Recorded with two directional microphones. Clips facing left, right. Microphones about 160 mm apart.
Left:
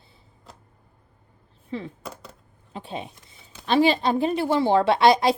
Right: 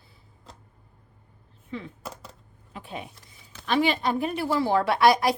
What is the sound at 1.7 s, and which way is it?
A woman's voice, 35° left (ahead or behind).